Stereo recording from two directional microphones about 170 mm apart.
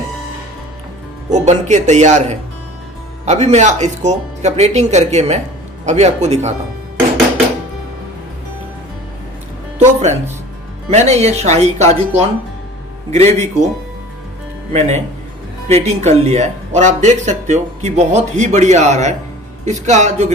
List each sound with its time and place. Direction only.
1.3 s speech: 45° right (ahead or behind)
9.7 s music: 45° right (ahead or behind)
10.9 s speech: 40° right (ahead or behind)
14.7 s speech: 40° right (ahead or behind)